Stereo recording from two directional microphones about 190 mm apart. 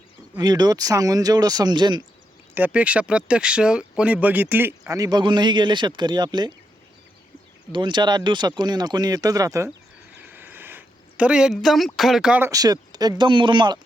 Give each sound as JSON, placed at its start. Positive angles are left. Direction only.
{"t": 0.3, "sound": "speech", "side_deg": -20}
{"t": 2.6, "sound": "speech", "side_deg": -10}
{"t": 7.7, "sound": "speech", "side_deg": -25}
{"t": 10.2, "sound": "a sound", "side_deg": -10}
{"t": 11.9, "sound": "speech", "side_deg": 0}